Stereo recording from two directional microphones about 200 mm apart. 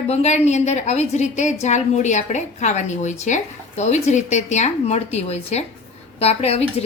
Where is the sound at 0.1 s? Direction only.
35° left (ahead or behind).